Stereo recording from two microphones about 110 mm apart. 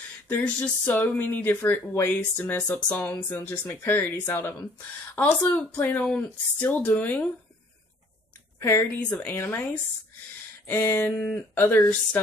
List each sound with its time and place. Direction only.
0.3 s speech: 15° left (ahead or behind)
9.3 s speech: 20° left (ahead or behind)
10.7 s speech: 20° left (ahead or behind)